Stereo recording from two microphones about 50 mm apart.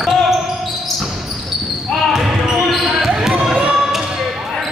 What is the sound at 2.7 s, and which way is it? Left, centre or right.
Basketball bounce, centre.